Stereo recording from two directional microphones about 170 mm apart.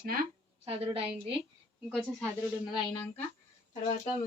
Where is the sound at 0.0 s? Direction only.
60° right (ahead or behind).